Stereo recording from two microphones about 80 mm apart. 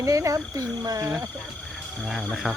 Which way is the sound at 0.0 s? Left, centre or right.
Right.